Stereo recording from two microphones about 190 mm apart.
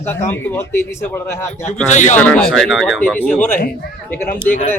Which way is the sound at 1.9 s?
40° left (ahead or behind).